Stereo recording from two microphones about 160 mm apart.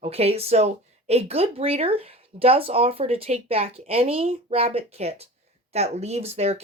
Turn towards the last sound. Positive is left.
turn(degrees=-40)  # may be behind; listen again after turning